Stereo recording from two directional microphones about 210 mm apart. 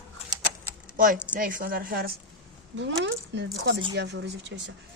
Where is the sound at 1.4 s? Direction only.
40° right (ahead or behind).